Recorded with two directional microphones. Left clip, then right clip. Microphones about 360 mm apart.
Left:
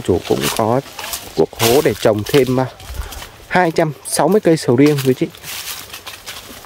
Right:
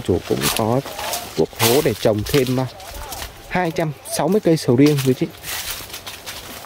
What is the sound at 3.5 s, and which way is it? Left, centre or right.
Speech, centre.